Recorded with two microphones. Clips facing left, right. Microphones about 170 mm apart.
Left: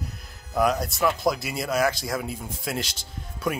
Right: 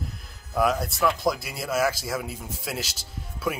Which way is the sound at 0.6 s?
Centre (ahead or behind).